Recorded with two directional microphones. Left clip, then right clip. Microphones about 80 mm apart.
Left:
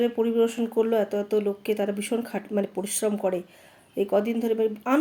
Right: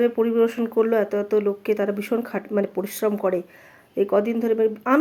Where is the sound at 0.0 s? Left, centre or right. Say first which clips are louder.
Right 4 dB; left.